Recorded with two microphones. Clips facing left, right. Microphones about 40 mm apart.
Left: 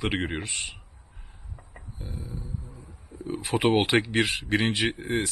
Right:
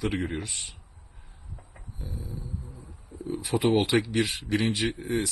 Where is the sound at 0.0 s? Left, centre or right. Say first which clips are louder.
Left 1 dB; left.